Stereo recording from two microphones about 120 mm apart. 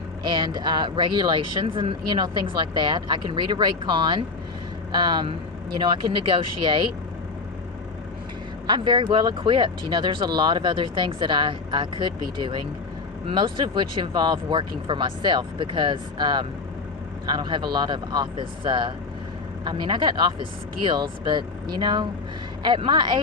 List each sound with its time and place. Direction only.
0.3 s speech: 40° right (ahead or behind)
8.6 s speech: 40° right (ahead or behind)